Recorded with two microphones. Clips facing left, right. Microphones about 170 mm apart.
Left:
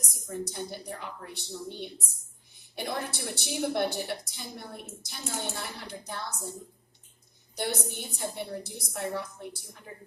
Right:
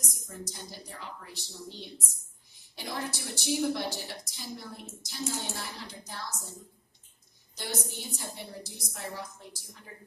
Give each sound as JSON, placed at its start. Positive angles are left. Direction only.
{"t": 0.3, "sound": "a woman's voice", "side_deg": 60}
{"t": 7.5, "sound": "a woman's voice", "side_deg": 55}